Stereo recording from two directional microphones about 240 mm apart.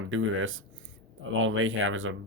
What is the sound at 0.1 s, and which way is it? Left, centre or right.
Speech, right.